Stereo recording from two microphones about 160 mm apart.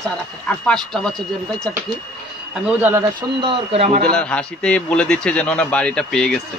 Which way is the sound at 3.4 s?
35° right (ahead or behind).